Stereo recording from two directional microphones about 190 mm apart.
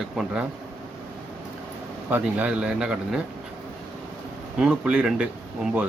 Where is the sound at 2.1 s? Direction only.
10° right (ahead or behind).